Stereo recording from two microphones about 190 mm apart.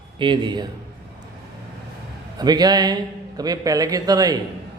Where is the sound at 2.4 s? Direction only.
20° right (ahead or behind).